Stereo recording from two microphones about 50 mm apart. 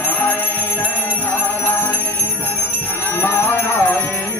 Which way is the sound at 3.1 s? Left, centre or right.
Left.